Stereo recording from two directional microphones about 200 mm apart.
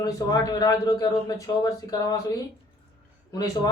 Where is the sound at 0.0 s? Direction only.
20° left (ahead or behind).